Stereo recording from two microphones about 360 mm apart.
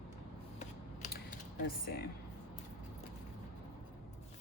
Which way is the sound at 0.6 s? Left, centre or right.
Centre.